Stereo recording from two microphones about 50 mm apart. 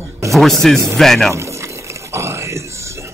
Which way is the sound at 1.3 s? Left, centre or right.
Right.